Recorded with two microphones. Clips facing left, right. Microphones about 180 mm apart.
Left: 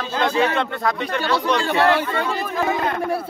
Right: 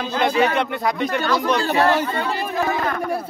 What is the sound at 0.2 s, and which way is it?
Speech, 10° right (ahead or behind).